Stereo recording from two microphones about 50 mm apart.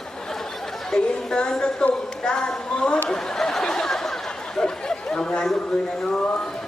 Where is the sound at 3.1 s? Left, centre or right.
Centre.